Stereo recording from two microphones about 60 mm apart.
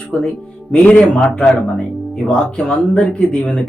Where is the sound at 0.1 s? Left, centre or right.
Centre.